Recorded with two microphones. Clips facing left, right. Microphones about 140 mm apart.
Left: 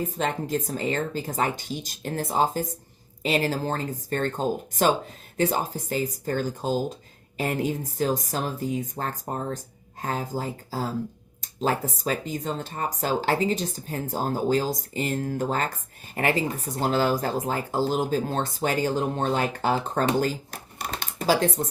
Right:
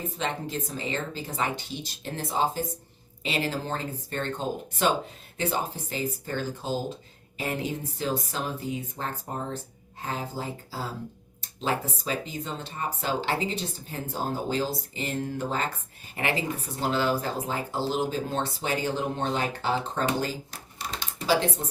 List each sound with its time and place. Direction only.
0.0 s speech: 45° left (ahead or behind)
5.4 s speech: 40° left (ahead or behind)